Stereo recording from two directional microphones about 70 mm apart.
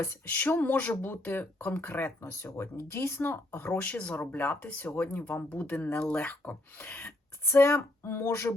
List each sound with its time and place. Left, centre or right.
0.3 s speech: left
2.3 s speech: left
3.8 s speech: left
7.4 s speech: left